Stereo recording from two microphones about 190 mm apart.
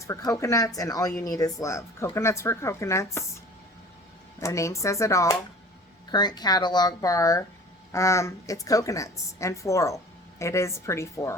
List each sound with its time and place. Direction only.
0.1 s a woman's voice: 15° left (ahead or behind)
4.4 s a woman's voice: 15° left (ahead or behind)